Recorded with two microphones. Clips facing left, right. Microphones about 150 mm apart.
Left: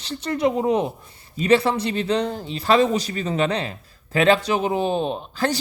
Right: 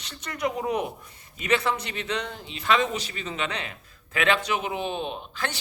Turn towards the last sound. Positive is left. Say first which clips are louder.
# left 9 dB
turn(degrees=35)  # may be behind; listen again after turning